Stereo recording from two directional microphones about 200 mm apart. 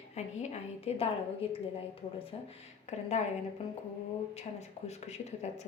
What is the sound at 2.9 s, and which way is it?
A woman's voice, 35° left (ahead or behind).